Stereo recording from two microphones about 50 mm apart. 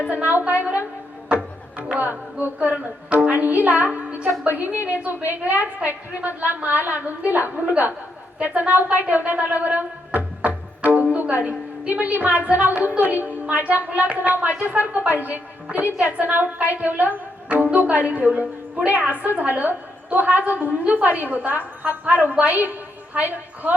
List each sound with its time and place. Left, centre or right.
0.1 s a woman's voice: right
1.9 s music: right
3.1 s a woman's voice: right
7.6 s a woman's voice: right
9.1 s music: right
11.2 s a sound: right
12.1 s a woman's voice: right